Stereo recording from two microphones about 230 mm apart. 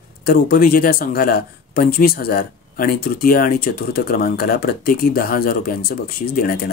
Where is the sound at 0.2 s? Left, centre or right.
Left.